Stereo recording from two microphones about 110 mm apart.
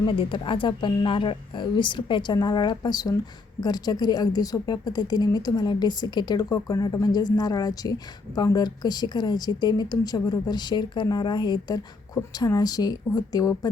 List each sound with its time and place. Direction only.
0.0 s a woman's voice: 50° left (ahead or behind); by 13.7 s 35° left (ahead or behind)